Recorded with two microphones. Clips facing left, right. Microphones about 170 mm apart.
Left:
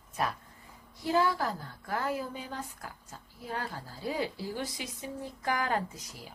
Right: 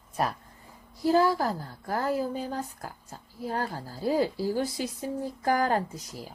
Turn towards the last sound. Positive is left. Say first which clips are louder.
# right 4 dB
turn(degrees=-40)  # may be behind; listen again after turning